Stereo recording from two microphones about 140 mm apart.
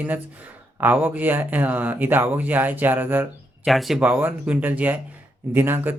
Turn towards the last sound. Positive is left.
turn(degrees=-15)  # may be behind; listen again after turning